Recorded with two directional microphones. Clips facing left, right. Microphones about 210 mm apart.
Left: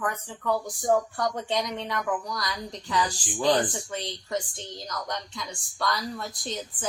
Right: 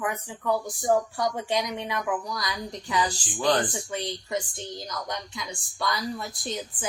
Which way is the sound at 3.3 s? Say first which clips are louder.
Left 1 dB; 15° left (ahead or behind).